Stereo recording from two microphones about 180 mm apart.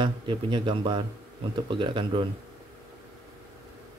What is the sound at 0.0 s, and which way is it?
Speech, 25° right (ahead or behind).